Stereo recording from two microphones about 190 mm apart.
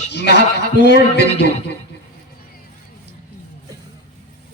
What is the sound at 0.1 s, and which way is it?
A man's voice, 65° left (ahead or behind).